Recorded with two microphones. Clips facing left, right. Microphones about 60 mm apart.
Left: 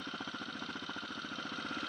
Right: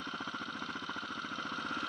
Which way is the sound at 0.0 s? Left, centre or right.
Right.